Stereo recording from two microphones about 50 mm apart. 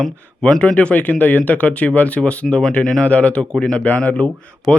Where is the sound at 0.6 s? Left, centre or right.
Left.